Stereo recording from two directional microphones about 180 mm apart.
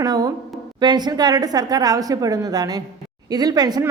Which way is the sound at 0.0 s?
20° right (ahead or behind).